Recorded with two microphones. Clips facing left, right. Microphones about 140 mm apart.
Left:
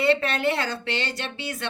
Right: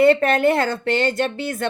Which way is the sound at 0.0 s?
50° right (ahead or behind).